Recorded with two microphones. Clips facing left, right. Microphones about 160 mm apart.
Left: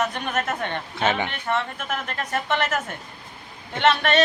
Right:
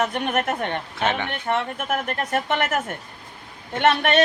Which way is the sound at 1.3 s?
55° right (ahead or behind).